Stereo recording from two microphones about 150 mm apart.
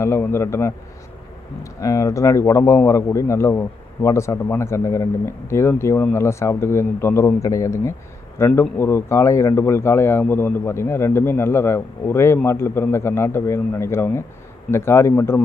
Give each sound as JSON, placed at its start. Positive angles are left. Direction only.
{"t": 0.0, "sound": "speech", "side_deg": 15}